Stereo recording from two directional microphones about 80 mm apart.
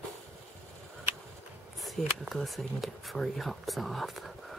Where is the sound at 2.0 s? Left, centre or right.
Centre.